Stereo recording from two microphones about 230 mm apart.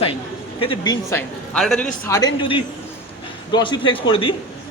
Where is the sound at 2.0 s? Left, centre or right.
Centre.